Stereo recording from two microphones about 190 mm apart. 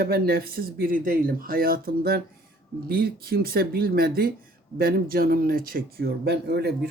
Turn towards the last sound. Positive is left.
turn(degrees=-60)  # may be behind; listen again after turning